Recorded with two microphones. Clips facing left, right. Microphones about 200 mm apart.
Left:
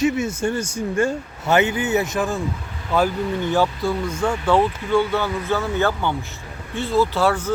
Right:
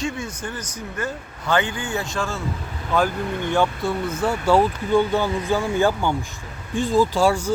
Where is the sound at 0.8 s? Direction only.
25° left (ahead or behind).